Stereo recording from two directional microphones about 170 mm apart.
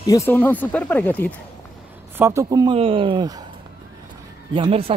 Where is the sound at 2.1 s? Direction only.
15° right (ahead or behind).